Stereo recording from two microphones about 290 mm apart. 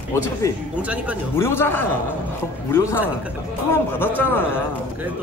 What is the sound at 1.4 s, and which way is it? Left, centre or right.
A man's voice, centre.